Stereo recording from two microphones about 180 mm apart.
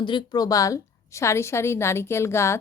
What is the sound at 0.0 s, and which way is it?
A woman's voice, 25° left (ahead or behind).